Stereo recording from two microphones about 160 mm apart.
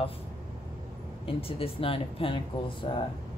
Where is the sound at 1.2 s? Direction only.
35° left (ahead or behind).